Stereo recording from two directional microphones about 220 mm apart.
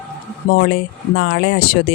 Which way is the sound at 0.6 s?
50° left (ahead or behind).